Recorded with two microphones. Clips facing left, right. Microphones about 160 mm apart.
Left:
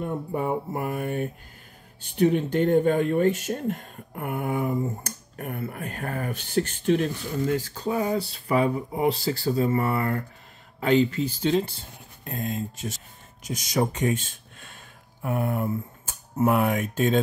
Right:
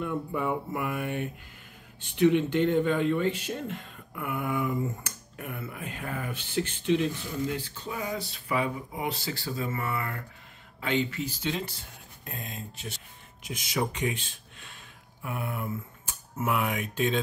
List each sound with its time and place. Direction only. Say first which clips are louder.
0.0 s speech: left 2 dB; 40° left (ahead or behind)
12.3 s speech: left 10 dB; 45° left (ahead or behind)